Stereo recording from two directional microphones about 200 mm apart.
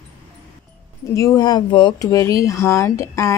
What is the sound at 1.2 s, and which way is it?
Speech, 15° left (ahead or behind).